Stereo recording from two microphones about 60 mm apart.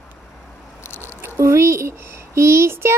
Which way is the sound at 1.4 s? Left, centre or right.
Right.